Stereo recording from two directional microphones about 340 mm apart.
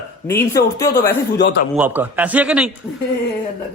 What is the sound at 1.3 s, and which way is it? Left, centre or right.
Speech, left.